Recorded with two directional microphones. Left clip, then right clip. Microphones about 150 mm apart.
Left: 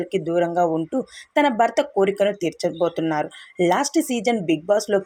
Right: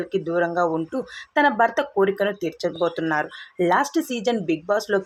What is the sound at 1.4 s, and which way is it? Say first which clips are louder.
Speech: even; 25° left (ahead or behind).